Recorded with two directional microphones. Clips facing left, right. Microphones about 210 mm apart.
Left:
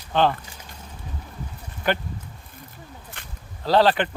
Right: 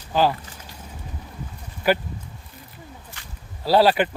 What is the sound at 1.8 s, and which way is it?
Speech, 10° right (ahead or behind).